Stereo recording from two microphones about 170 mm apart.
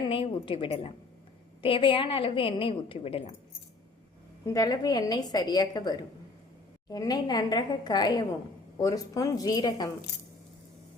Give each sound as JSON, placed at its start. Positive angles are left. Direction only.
{"t": 0.0, "sound": "a woman's voice", "side_deg": 30}
{"t": 4.4, "sound": "a woman's voice", "side_deg": 20}